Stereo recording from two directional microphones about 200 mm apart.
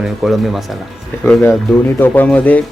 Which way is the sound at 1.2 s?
10° left (ahead or behind).